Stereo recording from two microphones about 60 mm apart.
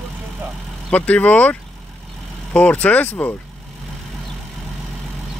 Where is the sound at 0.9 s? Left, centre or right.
Left.